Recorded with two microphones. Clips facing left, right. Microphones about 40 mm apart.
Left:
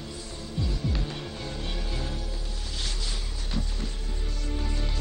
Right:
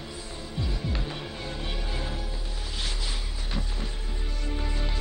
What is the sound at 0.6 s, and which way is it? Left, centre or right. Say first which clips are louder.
Music: left 1 dB; centre.